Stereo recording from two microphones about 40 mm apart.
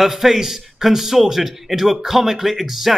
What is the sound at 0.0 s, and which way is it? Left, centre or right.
A man's voice, centre.